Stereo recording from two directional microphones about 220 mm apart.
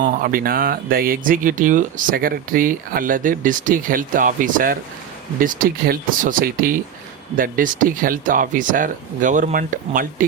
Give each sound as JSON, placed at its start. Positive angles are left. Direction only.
{"t": 0.0, "sound": "speech", "side_deg": -40}